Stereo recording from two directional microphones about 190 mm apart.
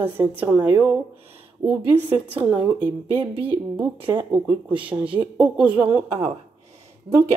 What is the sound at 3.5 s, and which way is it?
Speech, 10° right (ahead or behind).